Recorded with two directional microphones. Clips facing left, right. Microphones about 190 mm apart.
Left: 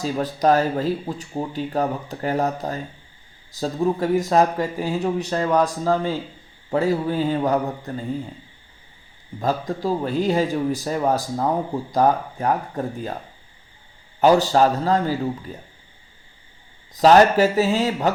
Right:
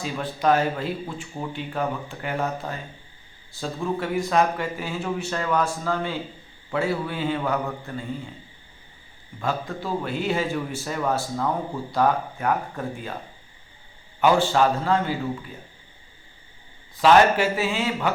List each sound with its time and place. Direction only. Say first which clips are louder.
0.0 s speech: left 4 dB; 40° left (ahead or behind)
9.4 s speech: left 5 dB; 40° left (ahead or behind)
14.2 s speech: left 4 dB; 40° left (ahead or behind)
16.9 s speech: left 3 dB; 40° left (ahead or behind)